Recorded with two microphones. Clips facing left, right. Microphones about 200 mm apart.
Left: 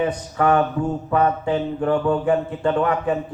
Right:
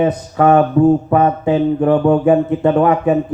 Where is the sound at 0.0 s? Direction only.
40° right (ahead or behind).